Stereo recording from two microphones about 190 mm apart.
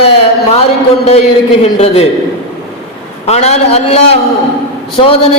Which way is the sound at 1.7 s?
35° left (ahead or behind).